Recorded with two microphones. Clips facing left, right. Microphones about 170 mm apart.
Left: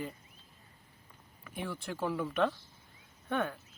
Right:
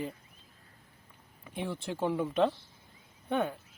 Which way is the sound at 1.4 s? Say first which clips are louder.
Right 3 dB; 25° right (ahead or behind).